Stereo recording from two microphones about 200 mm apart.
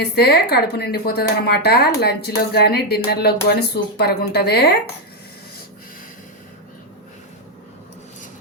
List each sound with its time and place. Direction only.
0.0 s a woman's voice: 55° left (ahead or behind)